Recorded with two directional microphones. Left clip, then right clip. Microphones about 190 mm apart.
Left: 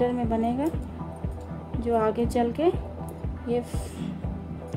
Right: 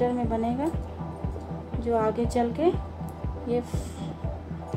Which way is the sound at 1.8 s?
45° left (ahead or behind).